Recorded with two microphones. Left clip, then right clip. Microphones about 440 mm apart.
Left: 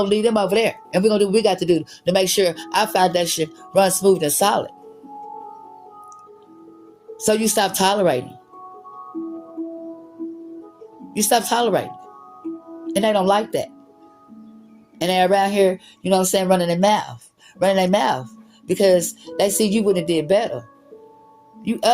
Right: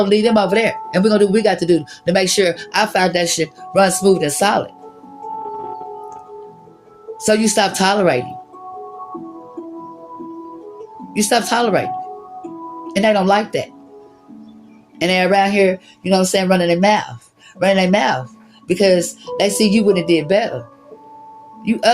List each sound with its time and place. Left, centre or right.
0.0 s speech: left
7.2 s speech: left
11.1 s speech: left
12.9 s speech: left
14.9 s speech: left
21.6 s speech: left